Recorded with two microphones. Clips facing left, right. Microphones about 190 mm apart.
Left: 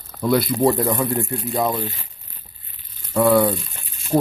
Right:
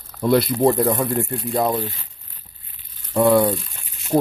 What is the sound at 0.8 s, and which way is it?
Speech, 5° right (ahead or behind).